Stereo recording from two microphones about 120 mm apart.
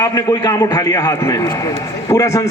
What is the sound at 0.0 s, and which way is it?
A man's voice, 30° left (ahead or behind).